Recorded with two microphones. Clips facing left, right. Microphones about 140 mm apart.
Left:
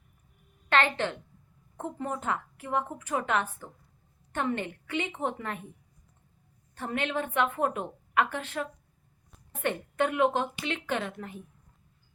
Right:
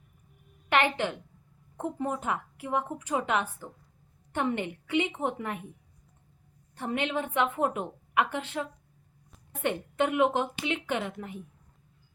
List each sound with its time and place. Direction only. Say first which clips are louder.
0.7 s a woman's voice: even; 15° right (ahead or behind)
6.7 s a woman's voice: right 1 dB; 15° right (ahead or behind)
9.6 s a woman's voice: right 1 dB; 15° right (ahead or behind)